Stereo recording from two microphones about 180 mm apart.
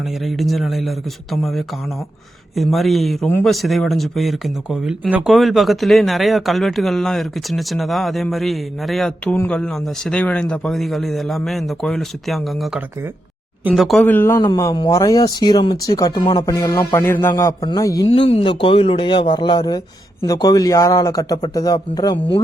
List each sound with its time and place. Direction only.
0.0 s speech: centre (ahead or behind)
3.2 s a man's voice: 10° left (ahead or behind)
3.5 s speech: centre (ahead or behind)
14.0 s a man's voice: 10° left (ahead or behind)
18.1 s speech: 35° left (ahead or behind)